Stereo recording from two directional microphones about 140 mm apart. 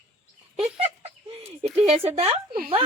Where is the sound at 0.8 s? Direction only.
45° right (ahead or behind).